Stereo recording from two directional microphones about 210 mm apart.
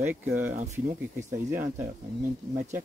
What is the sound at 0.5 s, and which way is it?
Speech, 35° right (ahead or behind).